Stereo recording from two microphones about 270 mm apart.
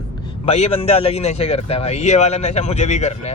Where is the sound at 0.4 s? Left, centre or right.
Left.